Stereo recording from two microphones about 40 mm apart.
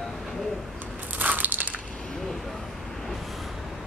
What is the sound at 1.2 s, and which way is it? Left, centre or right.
Crushing, right.